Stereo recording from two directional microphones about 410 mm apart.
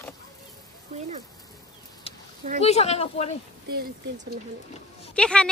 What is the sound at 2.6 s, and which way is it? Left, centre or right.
Speech, centre.